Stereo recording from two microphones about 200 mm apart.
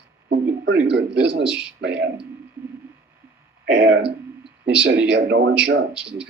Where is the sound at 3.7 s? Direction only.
70° right (ahead or behind).